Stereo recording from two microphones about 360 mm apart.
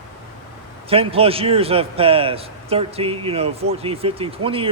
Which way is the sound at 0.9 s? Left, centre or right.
Centre.